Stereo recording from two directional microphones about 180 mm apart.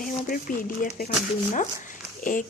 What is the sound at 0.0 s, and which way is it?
Speech, 50° left (ahead or behind).